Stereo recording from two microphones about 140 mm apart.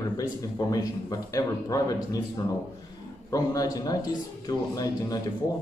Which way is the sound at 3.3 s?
25° left (ahead or behind).